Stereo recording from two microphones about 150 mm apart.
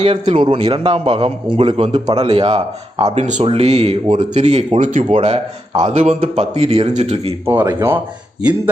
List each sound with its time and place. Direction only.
0.0 s a man's voice: 40° right (ahead or behind)
1.9 s a man's voice: 30° right (ahead or behind)
3.0 s speech: 50° right (ahead or behind)
7.4 s a man's voice: 20° right (ahead or behind)